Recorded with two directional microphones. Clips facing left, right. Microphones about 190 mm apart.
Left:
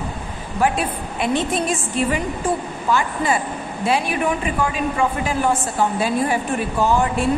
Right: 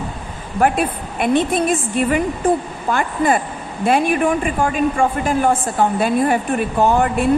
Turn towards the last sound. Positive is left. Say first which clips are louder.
# right 3 dB
turn(degrees=-55)  # may be behind; listen again after turning